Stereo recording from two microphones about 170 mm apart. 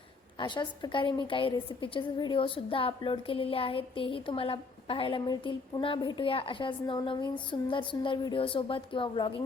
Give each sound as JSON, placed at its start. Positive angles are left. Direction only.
{"t": 0.3, "sound": "a woman's voice", "side_deg": 25}